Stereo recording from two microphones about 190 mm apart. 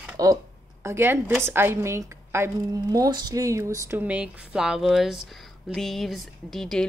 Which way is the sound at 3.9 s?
5° right (ahead or behind).